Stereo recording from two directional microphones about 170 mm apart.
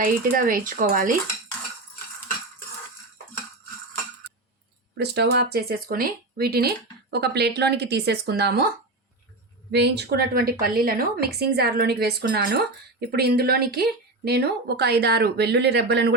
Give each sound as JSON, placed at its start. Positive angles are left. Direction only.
{"t": 0.0, "sound": "speech", "side_deg": -55}
{"t": 4.9, "sound": "speech", "side_deg": -80}
{"t": 9.7, "sound": "speech", "side_deg": -80}